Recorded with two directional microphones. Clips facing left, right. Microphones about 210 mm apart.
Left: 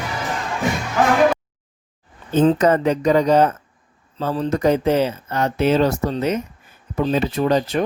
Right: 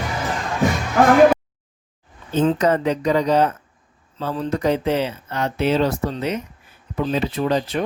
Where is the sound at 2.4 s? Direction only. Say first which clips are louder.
Left 3 dB; 45° left (ahead or behind).